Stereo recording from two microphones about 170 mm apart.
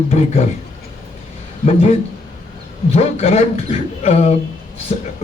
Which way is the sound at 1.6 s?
40° left (ahead or behind).